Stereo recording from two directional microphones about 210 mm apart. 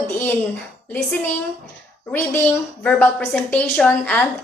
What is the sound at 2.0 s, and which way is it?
A woman's voice, 10° left (ahead or behind).